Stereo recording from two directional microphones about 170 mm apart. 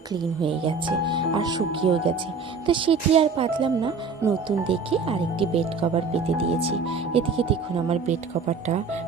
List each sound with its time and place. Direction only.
0.1 s speech: 30° right (ahead or behind)